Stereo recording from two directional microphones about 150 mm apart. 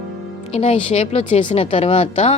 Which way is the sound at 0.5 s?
40° left (ahead or behind).